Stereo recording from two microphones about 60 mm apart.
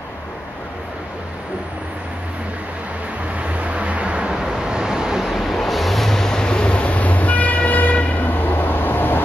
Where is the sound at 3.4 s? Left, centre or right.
Right.